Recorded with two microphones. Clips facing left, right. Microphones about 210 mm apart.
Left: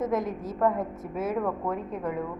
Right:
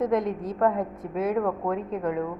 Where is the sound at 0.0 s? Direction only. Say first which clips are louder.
Right 3 dB; centre (ahead or behind).